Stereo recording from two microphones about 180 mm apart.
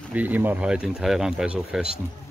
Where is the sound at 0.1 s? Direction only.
10° right (ahead or behind).